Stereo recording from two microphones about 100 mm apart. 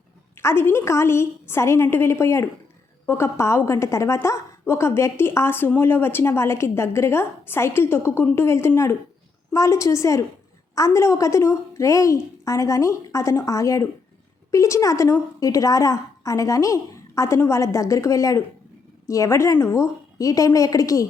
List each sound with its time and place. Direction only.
0.3 s a woman's voice: 25° left (ahead or behind)